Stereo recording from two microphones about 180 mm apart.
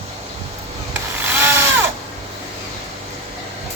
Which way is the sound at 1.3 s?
10° right (ahead or behind).